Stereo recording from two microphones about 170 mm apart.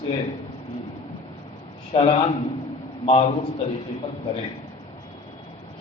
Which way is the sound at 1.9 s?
35° left (ahead or behind).